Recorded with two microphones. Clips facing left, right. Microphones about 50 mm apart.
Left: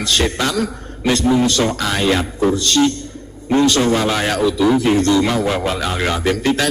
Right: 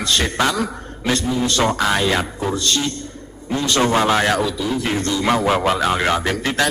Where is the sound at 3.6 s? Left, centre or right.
Right.